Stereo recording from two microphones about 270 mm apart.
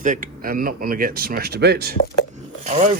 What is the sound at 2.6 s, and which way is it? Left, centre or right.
Speech, right.